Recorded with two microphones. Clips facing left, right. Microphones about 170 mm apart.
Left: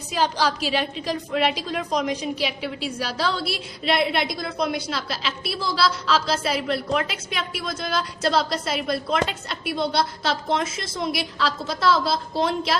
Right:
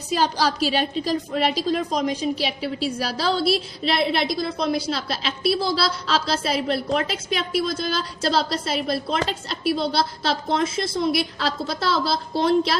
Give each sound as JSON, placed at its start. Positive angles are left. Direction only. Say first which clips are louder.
{"t": 0.1, "sound": "a woman's voice", "louder": "right 1 dB", "side_deg": -40}